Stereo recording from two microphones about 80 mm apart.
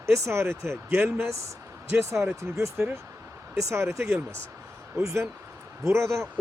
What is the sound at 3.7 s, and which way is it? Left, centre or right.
Speech, right.